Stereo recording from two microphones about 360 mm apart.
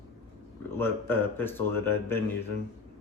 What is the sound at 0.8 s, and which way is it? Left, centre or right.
A man's voice, centre.